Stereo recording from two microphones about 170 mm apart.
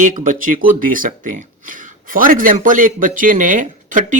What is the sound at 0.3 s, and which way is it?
Speech, 55° right (ahead or behind).